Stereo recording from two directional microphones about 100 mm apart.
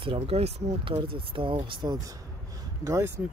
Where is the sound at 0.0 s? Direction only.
60° right (ahead or behind); by 2.1 s 45° right (ahead or behind).